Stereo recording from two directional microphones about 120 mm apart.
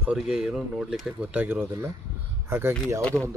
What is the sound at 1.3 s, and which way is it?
A man's voice, 15° right (ahead or behind).